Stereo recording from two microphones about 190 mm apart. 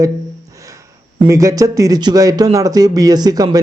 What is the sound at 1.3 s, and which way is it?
Speech, 15° right (ahead or behind).